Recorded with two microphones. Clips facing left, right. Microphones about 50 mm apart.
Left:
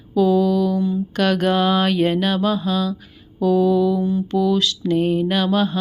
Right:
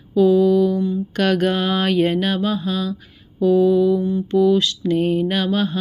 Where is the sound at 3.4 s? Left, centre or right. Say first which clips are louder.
Right 2 dB; left.